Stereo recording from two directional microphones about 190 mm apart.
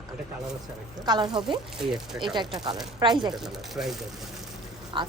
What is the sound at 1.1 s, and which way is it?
Speech, 20° right (ahead or behind).